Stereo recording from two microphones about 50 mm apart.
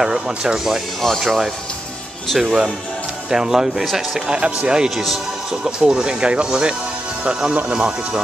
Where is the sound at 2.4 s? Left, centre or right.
Centre.